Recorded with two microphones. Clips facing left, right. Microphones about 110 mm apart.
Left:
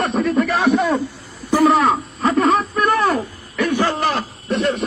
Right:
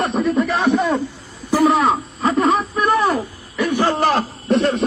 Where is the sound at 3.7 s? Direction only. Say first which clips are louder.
Right 1 dB; 15° right (ahead or behind).